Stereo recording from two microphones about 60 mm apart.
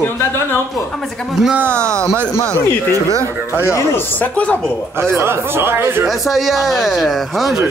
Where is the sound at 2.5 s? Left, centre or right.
Right.